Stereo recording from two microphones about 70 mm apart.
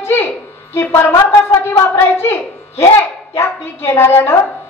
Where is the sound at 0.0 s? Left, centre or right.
Left.